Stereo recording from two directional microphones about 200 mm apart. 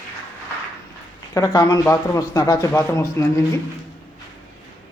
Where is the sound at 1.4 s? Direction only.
20° left (ahead or behind).